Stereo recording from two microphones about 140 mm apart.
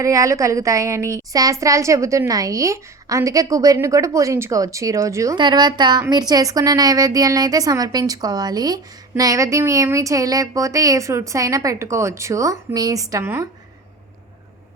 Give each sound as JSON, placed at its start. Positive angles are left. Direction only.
{"t": 0.0, "sound": "a woman's voice", "side_deg": -25}